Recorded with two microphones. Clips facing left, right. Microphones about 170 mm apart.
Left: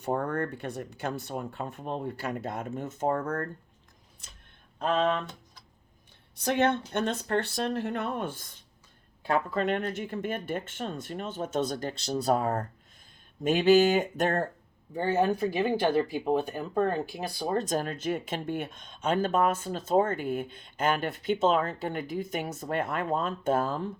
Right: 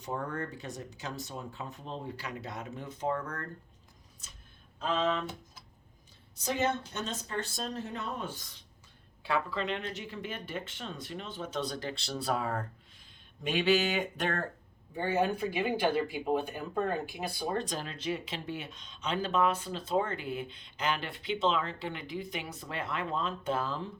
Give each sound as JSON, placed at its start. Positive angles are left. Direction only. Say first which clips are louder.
{"t": 0.0, "sound": "speech", "louder": "left 7 dB", "side_deg": 55}
{"t": 4.8, "sound": "speech", "louder": "left 4 dB", "side_deg": 55}
{"t": 6.4, "sound": "speech", "louder": "left 5 dB", "side_deg": 60}